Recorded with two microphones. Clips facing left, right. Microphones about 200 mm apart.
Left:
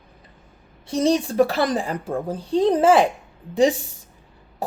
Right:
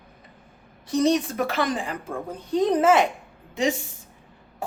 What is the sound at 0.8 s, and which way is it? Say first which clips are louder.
A woman's voice: left 1 dB; 30° left (ahead or behind).